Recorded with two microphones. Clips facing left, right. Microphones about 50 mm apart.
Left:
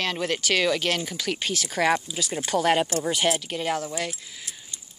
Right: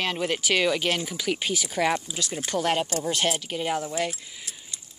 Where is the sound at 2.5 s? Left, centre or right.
Centre.